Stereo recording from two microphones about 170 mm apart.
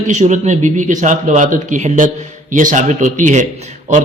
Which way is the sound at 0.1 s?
45° right (ahead or behind).